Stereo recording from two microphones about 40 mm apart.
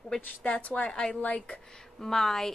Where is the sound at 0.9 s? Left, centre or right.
Left.